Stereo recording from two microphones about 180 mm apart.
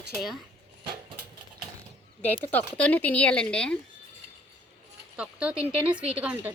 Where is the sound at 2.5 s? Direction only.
10° left (ahead or behind).